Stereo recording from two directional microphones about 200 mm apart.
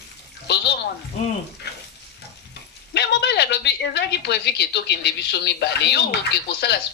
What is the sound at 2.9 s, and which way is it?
Speech, 55° left (ahead or behind).